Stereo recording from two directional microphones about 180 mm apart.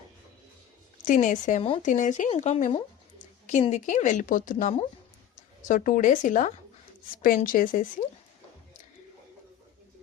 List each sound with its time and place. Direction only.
1.0 s speech: 45° left (ahead or behind)
5.6 s speech: 45° left (ahead or behind)